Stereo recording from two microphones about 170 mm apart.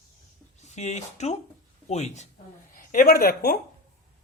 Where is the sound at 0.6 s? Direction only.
45° left (ahead or behind).